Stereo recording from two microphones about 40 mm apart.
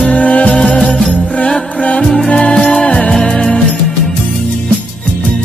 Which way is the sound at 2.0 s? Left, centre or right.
Centre.